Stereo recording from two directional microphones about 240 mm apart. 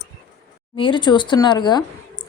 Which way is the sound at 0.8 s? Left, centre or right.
Centre.